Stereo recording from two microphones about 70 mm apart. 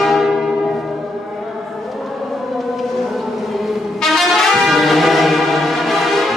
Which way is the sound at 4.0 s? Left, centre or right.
Centre.